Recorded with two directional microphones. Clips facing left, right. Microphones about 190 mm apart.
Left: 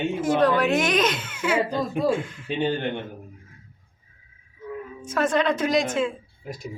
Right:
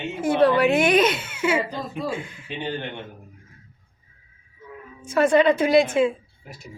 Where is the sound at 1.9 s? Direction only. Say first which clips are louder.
Left 6 dB; 50° left (ahead or behind).